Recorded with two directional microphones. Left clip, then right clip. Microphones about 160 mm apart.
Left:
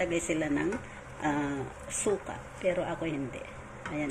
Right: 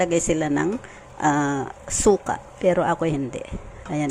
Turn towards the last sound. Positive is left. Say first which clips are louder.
# right 8 dB
turn(degrees=-45)  # may be behind; listen again after turning